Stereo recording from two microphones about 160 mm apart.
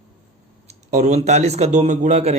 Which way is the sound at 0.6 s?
45° right (ahead or behind).